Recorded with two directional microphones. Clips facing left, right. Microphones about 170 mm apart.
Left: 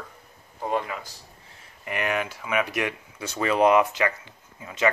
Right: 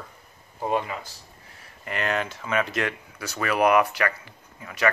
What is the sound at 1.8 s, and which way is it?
Speech, 15° left (ahead or behind).